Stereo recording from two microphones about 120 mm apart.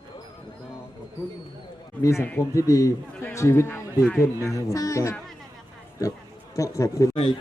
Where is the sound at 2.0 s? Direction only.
25° left (ahead or behind).